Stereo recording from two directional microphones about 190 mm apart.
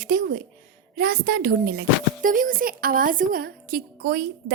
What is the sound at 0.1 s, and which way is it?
Speech, 50° right (ahead or behind).